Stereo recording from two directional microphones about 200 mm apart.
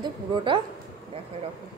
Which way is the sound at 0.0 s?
25° right (ahead or behind).